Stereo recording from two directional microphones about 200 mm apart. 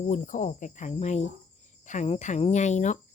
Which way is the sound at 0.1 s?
40° left (ahead or behind).